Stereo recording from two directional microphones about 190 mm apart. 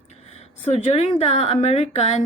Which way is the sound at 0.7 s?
35° left (ahead or behind).